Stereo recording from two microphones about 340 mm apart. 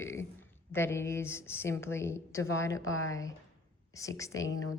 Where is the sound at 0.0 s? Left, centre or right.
Centre.